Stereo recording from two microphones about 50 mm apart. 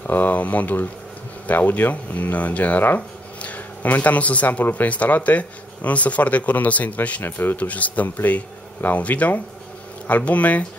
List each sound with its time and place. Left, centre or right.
0.0 s speech: left
7.2 s a man's voice: left
7.5 s speech: left